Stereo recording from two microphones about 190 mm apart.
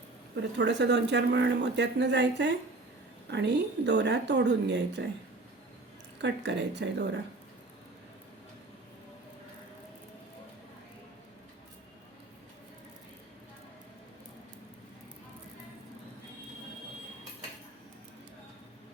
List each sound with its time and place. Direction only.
0.5 s speech: 65° right (ahead or behind)
6.2 s speech: 65° right (ahead or behind)